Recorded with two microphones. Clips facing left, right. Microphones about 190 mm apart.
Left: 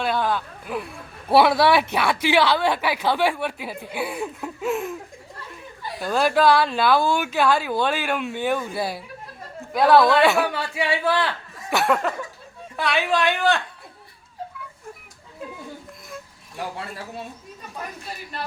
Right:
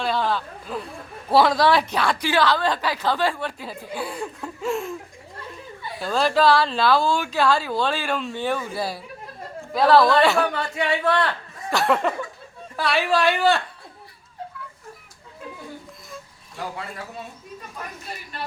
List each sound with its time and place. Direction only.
0.0 s a sound: centre (ahead or behind)
0.6 s a woman's voice: 15° left (ahead or behind)
6.0 s speech: 5° left (ahead or behind)
7.7 s a woman's voice: 15° left (ahead or behind)
8.7 s speech: centre (ahead or behind)